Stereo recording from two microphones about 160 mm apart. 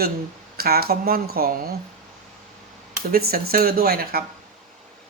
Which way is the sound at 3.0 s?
70° right (ahead or behind).